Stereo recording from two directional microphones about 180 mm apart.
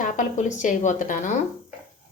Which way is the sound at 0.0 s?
45° left (ahead or behind).